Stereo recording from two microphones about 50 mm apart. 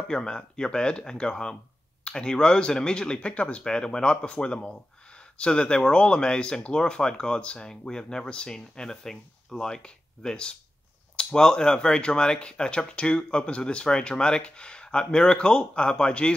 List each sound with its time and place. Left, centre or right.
0.1 s speech: centre